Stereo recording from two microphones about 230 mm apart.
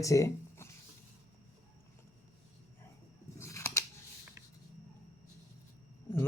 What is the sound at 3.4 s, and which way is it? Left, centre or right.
Scissors, centre.